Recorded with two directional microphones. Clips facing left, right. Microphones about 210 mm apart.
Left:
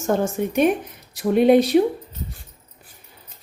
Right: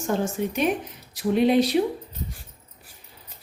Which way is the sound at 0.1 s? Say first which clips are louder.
Left 4 dB; 50° left (ahead or behind).